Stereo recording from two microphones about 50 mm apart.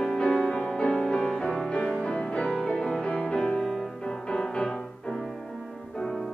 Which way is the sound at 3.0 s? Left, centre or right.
Left.